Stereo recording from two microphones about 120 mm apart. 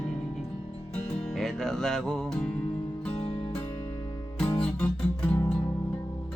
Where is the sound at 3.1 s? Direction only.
65° left (ahead or behind).